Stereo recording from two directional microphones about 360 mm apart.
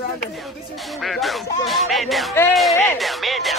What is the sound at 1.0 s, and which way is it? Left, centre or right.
Music, centre.